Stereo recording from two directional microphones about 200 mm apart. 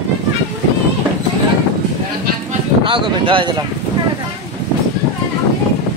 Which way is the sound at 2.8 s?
25° right (ahead or behind).